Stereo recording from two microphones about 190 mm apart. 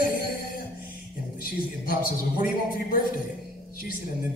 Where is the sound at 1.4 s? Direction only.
50° left (ahead or behind).